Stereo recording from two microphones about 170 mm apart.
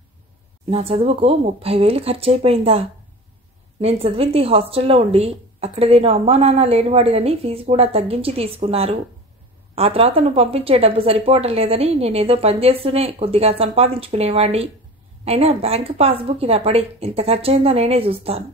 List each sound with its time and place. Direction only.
0.7 s a woman's voice: 35° right (ahead or behind)
3.8 s a woman's voice: 35° right (ahead or behind)